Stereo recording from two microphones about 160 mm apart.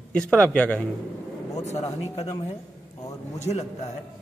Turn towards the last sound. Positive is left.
turn(degrees=45)  # may be behind; listen again after turning